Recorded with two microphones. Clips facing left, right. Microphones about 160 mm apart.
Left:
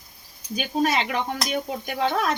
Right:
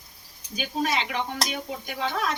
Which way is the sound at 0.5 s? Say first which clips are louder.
Left 4 dB; 55° left (ahead or behind).